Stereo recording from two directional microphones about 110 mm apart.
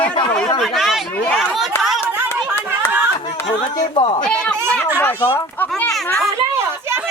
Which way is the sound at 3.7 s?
50° left (ahead or behind).